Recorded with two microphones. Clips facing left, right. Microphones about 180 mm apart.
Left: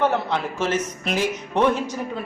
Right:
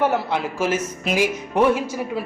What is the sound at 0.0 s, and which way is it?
Speech, 10° right (ahead or behind).